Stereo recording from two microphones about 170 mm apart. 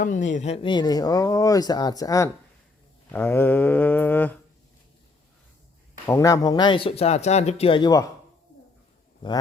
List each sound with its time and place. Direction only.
0.0 s speech: 50° left (ahead or behind); by 2.3 s 20° left (ahead or behind)
3.1 s mantra: 10° left (ahead or behind)
6.1 s speech: 20° left (ahead or behind)